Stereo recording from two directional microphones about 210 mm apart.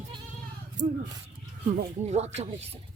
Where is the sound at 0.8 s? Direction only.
35° right (ahead or behind).